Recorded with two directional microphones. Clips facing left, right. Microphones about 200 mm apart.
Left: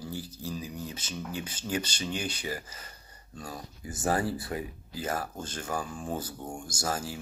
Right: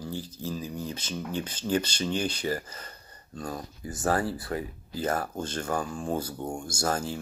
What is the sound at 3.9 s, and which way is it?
Speech, 20° left (ahead or behind).